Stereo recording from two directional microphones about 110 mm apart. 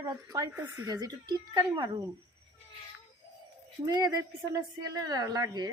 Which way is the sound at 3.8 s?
35° right (ahead or behind).